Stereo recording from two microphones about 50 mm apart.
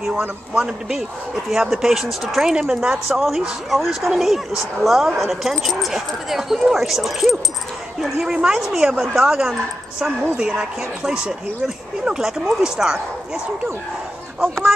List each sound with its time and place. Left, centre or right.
0.6 s speech: centre
2.5 s speech: centre
3.2 s speech: centre
8.2 s speech: centre
14.4 s speech: centre